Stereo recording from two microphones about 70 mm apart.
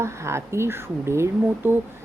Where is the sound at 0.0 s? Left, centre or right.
Right.